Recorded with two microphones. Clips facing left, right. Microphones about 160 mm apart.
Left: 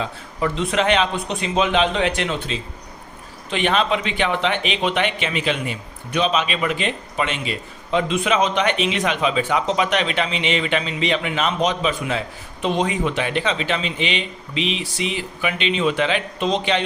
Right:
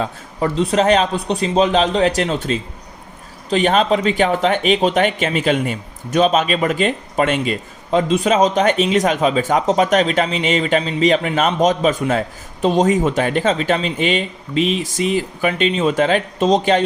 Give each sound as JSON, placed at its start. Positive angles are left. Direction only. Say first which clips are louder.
{"t": 0.0, "sound": "a man's voice", "louder": "right 3 dB", "side_deg": -40}